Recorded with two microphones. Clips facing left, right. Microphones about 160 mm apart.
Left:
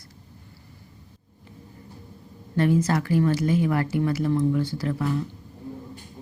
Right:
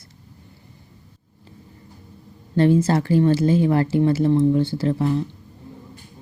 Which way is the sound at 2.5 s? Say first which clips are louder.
Right 5 dB; 30° right (ahead or behind).